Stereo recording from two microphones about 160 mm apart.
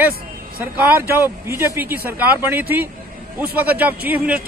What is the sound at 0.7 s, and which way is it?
Speech, 10° right (ahead or behind).